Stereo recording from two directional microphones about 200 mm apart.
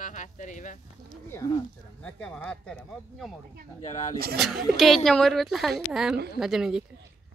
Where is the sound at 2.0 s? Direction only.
5° left (ahead or behind).